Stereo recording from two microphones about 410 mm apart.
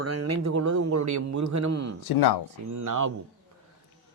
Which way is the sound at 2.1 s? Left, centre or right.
Left.